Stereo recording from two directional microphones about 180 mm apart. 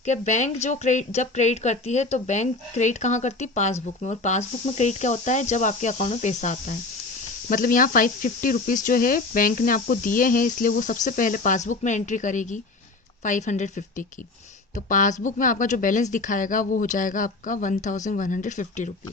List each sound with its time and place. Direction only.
0.0 s a woman's voice: 40° left (ahead or behind)